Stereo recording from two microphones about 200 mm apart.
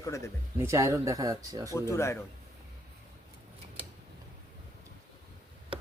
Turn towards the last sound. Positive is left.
turn(degrees=-25)  # may be behind; listen again after turning